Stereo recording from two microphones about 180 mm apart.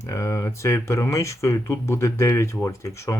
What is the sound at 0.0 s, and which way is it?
Speech, 15° left (ahead or behind).